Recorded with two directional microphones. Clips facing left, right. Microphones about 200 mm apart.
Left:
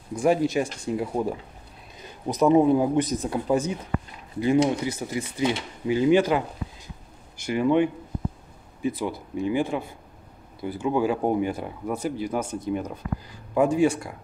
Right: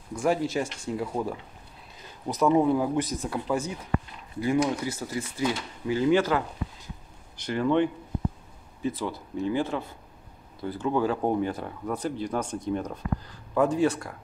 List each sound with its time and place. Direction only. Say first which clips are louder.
0.1 s speech: left 4 dB; 20° left (ahead or behind)